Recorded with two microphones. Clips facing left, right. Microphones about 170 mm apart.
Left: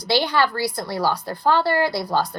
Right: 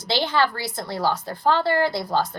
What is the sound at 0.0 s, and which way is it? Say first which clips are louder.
A woman's voice: left 2 dB; 20° right (ahead or behind).